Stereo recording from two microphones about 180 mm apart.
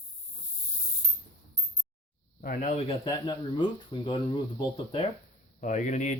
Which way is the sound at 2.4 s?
45° left (ahead or behind).